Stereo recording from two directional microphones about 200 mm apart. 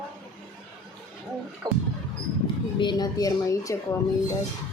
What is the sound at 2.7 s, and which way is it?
A woman's voice, 20° left (ahead or behind).